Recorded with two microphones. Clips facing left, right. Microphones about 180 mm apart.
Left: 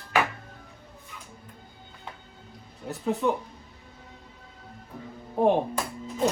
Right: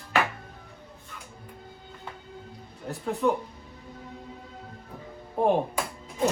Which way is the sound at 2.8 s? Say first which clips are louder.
Even; 5° left (ahead or behind).